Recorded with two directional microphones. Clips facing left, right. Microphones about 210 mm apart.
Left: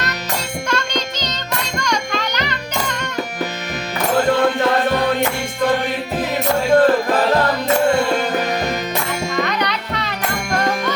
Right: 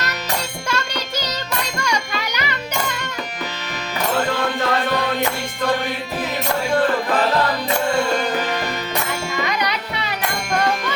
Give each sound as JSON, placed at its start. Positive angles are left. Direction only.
{"t": 0.7, "sound": "music", "side_deg": -10}
{"t": 6.7, "sound": "music", "side_deg": 40}
{"t": 9.5, "sound": "music", "side_deg": -10}